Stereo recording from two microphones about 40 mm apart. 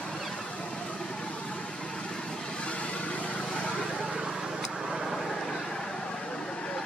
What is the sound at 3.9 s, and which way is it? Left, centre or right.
Vehicle, centre.